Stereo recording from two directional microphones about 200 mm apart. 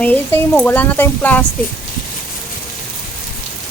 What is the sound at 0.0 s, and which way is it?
Speech, 10° left (ahead or behind).